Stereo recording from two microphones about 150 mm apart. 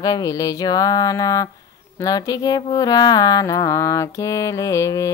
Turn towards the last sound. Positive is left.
turn(degrees=20)  # may be behind; listen again after turning